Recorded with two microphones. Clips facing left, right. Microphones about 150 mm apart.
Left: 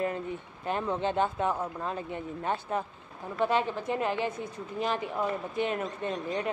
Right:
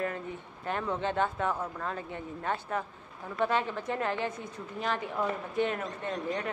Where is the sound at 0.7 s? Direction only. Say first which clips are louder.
Left 2 dB; 20° left (ahead or behind).